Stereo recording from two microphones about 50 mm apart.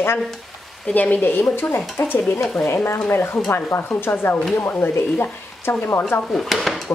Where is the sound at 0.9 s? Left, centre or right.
Left.